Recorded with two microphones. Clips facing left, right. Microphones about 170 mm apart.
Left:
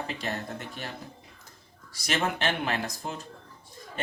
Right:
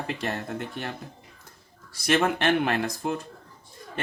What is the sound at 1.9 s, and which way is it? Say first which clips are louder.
A man's voice: right 6 dB; 60° right (ahead or behind).